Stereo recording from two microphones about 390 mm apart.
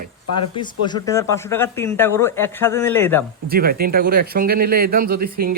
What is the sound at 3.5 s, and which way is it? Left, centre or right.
Speech, right.